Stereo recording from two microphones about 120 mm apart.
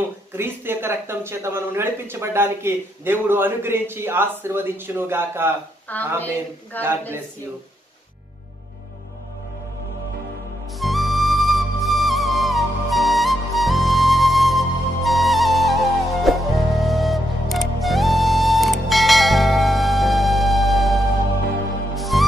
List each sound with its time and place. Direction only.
0.4 s speech: 20° right (ahead or behind)
5.9 s speech: 15° left (ahead or behind)
6.8 s speech: 20° right (ahead or behind)
10.8 s flute: centre (ahead or behind)
21.9 s music: centre (ahead or behind)